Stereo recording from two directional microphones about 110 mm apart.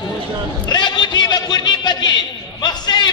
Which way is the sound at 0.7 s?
40° left (ahead or behind).